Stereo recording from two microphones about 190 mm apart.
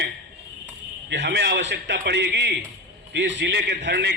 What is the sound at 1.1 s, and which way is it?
A man's voice, 65° right (ahead or behind).